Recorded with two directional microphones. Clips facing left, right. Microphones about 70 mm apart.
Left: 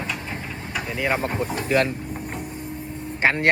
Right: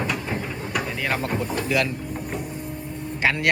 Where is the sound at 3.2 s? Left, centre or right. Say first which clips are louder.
Left 2 dB; left.